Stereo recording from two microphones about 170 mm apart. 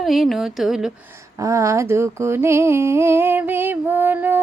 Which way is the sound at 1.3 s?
20° right (ahead or behind).